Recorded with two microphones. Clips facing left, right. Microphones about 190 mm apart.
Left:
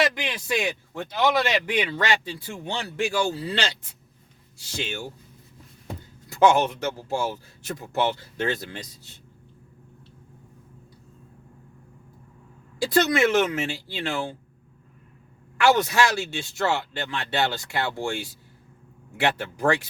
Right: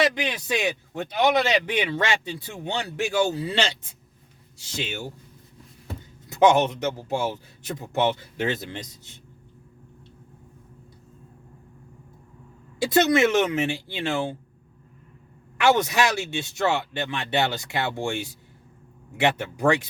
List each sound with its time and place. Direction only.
0.0 s a man's voice: 20° right (ahead or behind)
6.2 s a man's voice: 20° right (ahead or behind)
12.8 s a man's voice: 20° right (ahead or behind)
15.5 s a man's voice: 20° right (ahead or behind)